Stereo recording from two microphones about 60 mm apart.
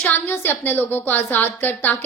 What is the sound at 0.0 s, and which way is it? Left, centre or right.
A woman's voice, left.